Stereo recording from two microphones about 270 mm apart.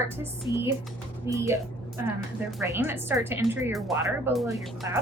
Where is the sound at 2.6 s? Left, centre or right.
Centre.